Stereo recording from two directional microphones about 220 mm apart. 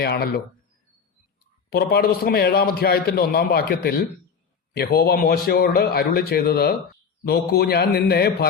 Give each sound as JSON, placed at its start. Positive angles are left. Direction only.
{"t": 0.0, "sound": "a man's voice", "side_deg": 45}
{"t": 1.7, "sound": "a man's voice", "side_deg": 45}